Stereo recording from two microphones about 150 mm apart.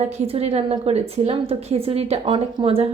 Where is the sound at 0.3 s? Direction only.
45° right (ahead or behind).